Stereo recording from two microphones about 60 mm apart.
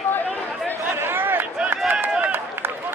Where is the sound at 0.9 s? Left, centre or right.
Right.